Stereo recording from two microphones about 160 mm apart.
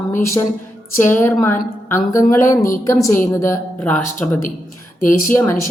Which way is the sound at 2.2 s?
60° left (ahead or behind).